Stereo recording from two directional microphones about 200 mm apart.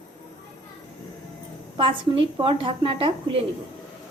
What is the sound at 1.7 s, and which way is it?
A woman's voice, 25° right (ahead or behind).